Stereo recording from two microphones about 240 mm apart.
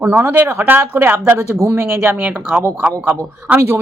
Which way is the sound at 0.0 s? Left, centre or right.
Centre.